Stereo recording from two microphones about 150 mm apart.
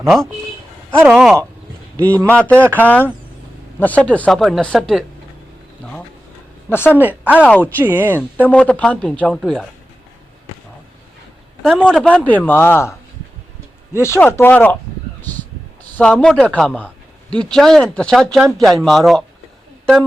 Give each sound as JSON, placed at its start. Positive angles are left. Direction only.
{"t": 0.1, "sound": "speech", "side_deg": 0}
{"t": 0.9, "sound": "speech", "side_deg": -15}
{"t": 2.0, "sound": "a woman's voice", "side_deg": 10}
{"t": 6.7, "sound": "a woman's voice", "side_deg": 15}
{"t": 6.9, "sound": "speech", "side_deg": -10}
{"t": 7.4, "sound": "a woman's voice", "side_deg": 10}
{"t": 7.8, "sound": "speech", "side_deg": -15}
{"t": 8.4, "sound": "a woman's voice", "side_deg": 10}
{"t": 11.6, "sound": "a woman's voice", "side_deg": 5}
{"t": 15.8, "sound": "a sound", "side_deg": 10}
{"t": 16.5, "sound": "speech", "side_deg": 10}